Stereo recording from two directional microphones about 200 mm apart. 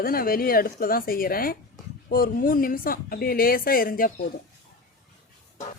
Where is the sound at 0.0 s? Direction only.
45° left (ahead or behind).